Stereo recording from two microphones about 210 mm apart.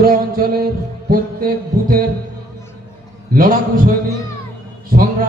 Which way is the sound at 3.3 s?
45° right (ahead or behind).